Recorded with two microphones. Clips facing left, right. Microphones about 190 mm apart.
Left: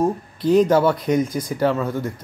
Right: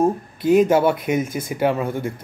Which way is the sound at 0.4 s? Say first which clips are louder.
Even; 50° right (ahead or behind).